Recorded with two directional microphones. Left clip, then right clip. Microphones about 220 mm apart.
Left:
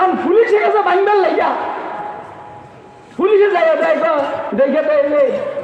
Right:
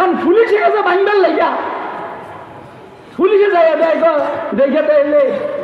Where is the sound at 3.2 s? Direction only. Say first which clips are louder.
Right 2 dB; 50° right (ahead or behind).